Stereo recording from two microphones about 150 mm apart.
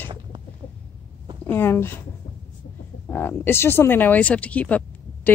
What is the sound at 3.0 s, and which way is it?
Speech, 10° left (ahead or behind).